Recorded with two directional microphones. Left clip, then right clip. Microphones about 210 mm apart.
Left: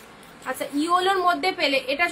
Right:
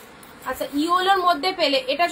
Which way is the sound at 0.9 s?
20° left (ahead or behind).